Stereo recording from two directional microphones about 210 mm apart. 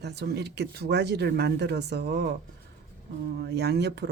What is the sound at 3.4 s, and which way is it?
Speech, 50° right (ahead or behind).